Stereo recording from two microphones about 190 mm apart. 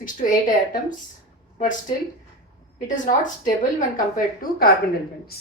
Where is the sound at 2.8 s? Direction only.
40° left (ahead or behind).